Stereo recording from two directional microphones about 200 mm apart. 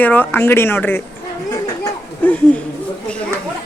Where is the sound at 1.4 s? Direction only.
20° left (ahead or behind).